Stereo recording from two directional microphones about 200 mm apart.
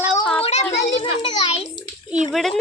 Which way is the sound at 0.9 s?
30° left (ahead or behind).